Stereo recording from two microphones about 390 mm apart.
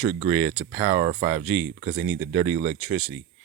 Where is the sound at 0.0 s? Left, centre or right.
Centre.